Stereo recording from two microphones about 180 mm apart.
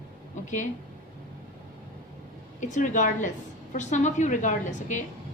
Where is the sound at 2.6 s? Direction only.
45° left (ahead or behind).